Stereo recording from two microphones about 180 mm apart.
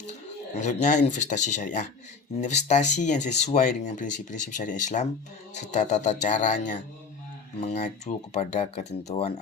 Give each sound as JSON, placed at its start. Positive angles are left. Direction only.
{"t": 0.5, "sound": "speech", "side_deg": 40}